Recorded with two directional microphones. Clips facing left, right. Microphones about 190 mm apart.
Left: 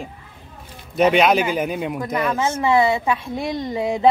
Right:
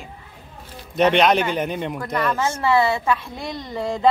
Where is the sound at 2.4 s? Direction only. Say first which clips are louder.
Left 2 dB; 20° left (ahead or behind).